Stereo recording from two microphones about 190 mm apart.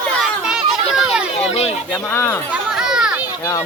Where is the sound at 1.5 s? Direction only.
35° left (ahead or behind).